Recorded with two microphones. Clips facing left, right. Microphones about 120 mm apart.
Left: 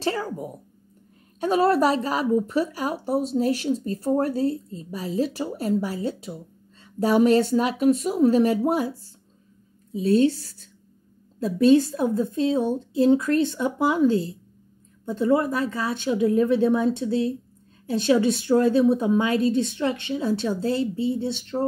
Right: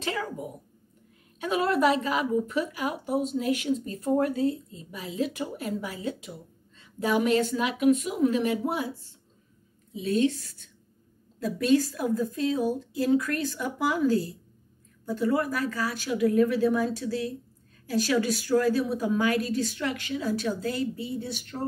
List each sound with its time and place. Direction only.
0.0 s a woman's voice: 35° left (ahead or behind)